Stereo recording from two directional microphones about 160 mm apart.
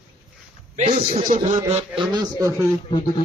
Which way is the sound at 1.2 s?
55° right (ahead or behind).